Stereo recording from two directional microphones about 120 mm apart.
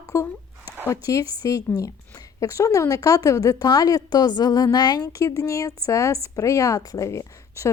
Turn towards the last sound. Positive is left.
turn(degrees=25)  # may be behind; listen again after turning